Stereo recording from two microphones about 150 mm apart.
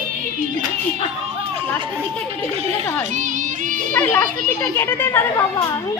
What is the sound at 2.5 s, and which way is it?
A child's voice, 45° right (ahead or behind).